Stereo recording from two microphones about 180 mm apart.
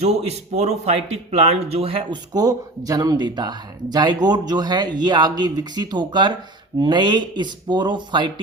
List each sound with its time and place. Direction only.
0.0 s speech: 40° right (ahead or behind)